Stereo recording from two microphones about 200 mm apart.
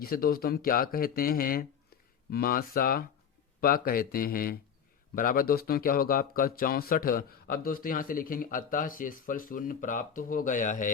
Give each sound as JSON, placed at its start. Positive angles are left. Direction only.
{"t": 0.0, "sound": "a man's voice", "side_deg": 50}